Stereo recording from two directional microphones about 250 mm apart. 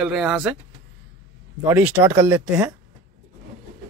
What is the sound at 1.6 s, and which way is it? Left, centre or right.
Speech, centre.